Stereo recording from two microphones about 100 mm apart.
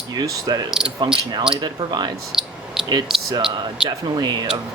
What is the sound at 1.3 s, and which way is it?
Speech, 45° right (ahead or behind).